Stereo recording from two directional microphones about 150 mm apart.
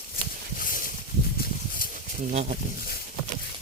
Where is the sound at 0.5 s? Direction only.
70° left (ahead or behind).